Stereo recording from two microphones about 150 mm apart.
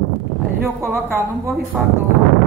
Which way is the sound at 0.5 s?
15° right (ahead or behind).